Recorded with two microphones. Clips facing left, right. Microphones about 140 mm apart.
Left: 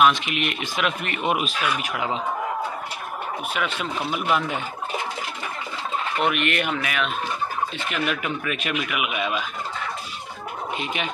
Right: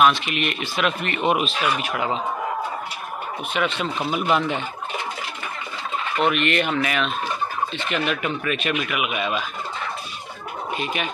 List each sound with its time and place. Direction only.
0.0 s speech: 15° left (ahead or behind)
3.5 s speech: 10° left (ahead or behind)
6.2 s speech: 10° left (ahead or behind)
10.8 s speech: 20° left (ahead or behind)